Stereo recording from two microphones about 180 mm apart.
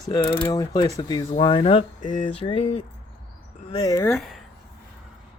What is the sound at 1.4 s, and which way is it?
Speech, 25° left (ahead or behind).